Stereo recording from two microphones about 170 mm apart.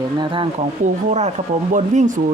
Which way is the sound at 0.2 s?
30° right (ahead or behind).